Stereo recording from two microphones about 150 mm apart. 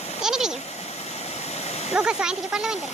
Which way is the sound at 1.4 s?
45° left (ahead or behind).